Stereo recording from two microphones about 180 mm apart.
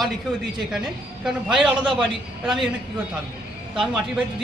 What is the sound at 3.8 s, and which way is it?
Speech, 5° right (ahead or behind).